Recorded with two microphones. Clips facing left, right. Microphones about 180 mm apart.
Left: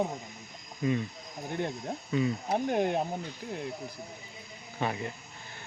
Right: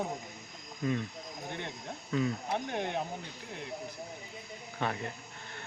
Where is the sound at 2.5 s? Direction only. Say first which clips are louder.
Left 6 dB; 40° left (ahead or behind).